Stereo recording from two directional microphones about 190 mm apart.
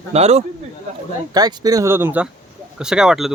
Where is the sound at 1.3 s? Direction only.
20° right (ahead or behind).